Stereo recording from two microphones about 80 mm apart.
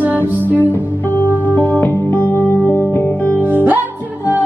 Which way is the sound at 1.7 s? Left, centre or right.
Left.